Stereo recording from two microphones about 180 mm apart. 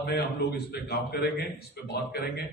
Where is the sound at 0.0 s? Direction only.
60° left (ahead or behind).